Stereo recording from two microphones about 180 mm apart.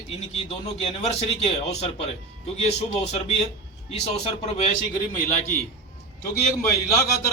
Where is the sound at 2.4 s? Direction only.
35° left (ahead or behind).